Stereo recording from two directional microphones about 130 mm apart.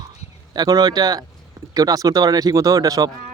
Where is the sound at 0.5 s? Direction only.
30° right (ahead or behind).